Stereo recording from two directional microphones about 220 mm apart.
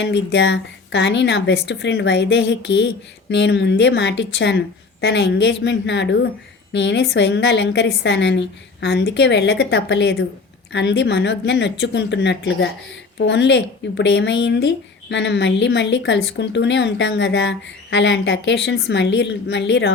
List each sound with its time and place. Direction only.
0.0 s speech: 50° left (ahead or behind)